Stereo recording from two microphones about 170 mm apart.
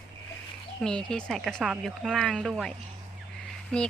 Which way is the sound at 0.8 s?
5° left (ahead or behind).